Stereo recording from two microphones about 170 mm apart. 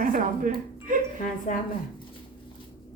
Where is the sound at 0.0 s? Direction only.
55° right (ahead or behind).